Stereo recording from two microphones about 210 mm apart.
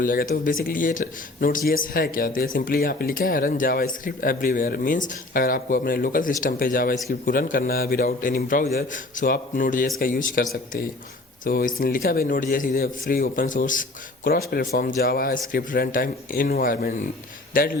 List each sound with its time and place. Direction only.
0.0 s speech: 40° left (ahead or behind)